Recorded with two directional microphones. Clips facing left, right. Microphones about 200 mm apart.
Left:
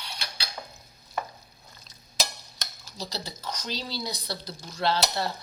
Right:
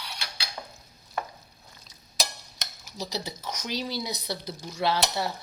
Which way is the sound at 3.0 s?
20° right (ahead or behind).